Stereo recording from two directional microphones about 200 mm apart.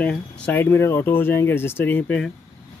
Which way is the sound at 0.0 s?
5° left (ahead or behind).